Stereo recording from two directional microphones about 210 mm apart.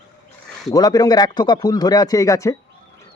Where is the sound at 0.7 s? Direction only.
20° left (ahead or behind).